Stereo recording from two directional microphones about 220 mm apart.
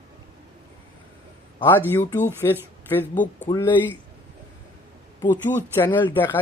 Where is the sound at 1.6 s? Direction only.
10° left (ahead or behind).